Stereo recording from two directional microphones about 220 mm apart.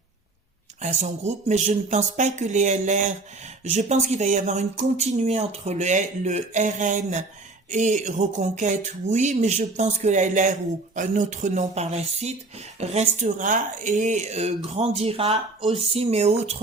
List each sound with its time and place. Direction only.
0.8 s speech: 30° right (ahead or behind)